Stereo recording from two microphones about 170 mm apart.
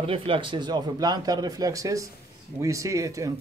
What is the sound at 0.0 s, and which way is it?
A man's voice, 30° right (ahead or behind).